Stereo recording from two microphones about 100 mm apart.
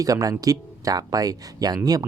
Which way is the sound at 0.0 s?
35° right (ahead or behind).